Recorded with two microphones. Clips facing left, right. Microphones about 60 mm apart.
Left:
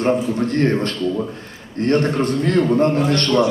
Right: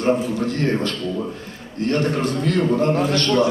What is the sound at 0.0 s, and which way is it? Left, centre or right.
Speech, left.